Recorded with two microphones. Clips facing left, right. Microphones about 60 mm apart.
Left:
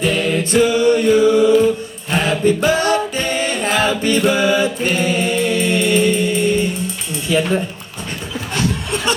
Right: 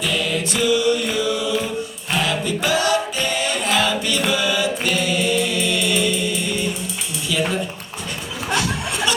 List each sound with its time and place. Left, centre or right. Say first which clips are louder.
0.0 s music: left 5 dB; left
2.1 s a capella: left 6 dB; left
8.5 s a sound: left 2 dB; left